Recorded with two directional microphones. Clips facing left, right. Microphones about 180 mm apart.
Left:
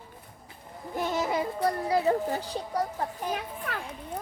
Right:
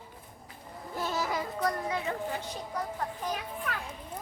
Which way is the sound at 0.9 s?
20° left (ahead or behind).